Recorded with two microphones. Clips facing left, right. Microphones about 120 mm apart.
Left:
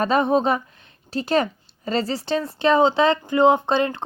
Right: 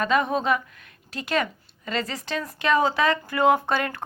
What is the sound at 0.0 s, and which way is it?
A woman's voice, 30° left (ahead or behind).